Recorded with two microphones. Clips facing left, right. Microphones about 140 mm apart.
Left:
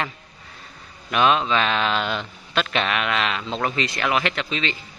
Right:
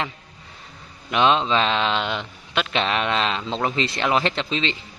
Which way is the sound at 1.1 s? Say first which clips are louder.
Right 1 dB; 25° right (ahead or behind).